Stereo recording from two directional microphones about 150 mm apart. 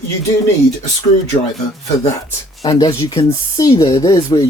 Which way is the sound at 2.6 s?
20° left (ahead or behind).